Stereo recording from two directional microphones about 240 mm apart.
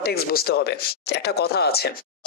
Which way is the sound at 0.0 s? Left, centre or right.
Left.